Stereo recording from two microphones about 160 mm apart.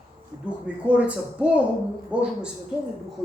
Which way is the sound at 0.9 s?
10° right (ahead or behind).